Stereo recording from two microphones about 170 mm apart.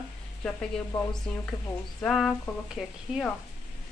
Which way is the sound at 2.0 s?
5° left (ahead or behind).